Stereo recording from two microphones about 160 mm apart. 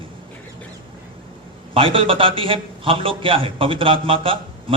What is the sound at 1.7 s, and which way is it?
A man's voice, 35° right (ahead or behind).